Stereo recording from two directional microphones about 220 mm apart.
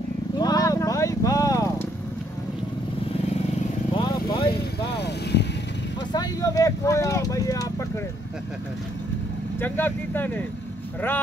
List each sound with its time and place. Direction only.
0.4 s vehicle: 15° left (ahead or behind)
3.9 s vehicle: 20° left (ahead or behind)
4.5 s vehicle: 45° left (ahead or behind)
6.1 s vehicle: 15° left (ahead or behind)
9.6 s speech: 10° left (ahead or behind)